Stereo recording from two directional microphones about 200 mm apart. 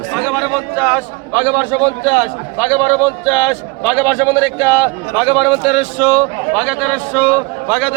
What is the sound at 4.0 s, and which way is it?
A man's voice, 15° right (ahead or behind).